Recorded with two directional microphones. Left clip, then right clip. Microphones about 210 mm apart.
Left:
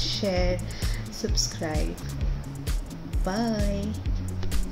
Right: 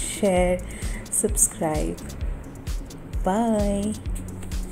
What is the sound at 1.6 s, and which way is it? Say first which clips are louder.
Music: right 6 dB; 25° right (ahead or behind).